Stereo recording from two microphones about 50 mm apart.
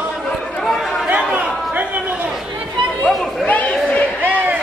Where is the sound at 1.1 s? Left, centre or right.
Right.